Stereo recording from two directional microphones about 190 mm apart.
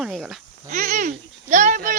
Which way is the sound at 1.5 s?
40° right (ahead or behind).